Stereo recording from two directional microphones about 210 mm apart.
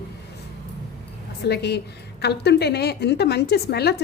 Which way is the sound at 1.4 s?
50° left (ahead or behind).